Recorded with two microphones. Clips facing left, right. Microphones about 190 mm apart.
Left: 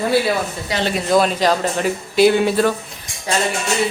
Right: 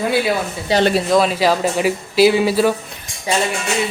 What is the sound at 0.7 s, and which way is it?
Speech, 30° right (ahead or behind).